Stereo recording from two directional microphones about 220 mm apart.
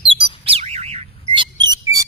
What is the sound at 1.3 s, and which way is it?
Mouse, 20° right (ahead or behind).